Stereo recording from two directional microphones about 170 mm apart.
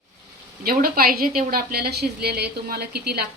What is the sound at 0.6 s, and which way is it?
A woman's voice, 60° right (ahead or behind).